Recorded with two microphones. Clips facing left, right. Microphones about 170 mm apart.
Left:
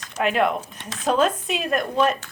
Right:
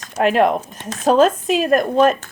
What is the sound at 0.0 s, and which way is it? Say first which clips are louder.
A woman's voice: right 6 dB; 40° right (ahead or behind).